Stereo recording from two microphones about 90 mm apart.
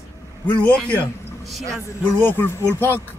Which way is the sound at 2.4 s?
25° left (ahead or behind).